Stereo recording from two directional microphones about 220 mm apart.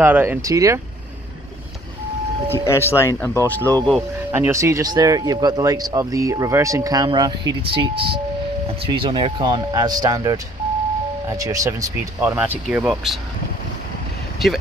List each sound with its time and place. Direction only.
0.0 s speech: 10° right (ahead or behind)
2.4 s speech: 10° left (ahead or behind)
4.3 s speech: 10° right (ahead or behind)
14.4 s speech: centre (ahead or behind)